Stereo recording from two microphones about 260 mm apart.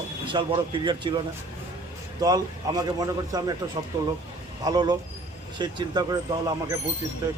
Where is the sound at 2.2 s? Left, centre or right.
Centre.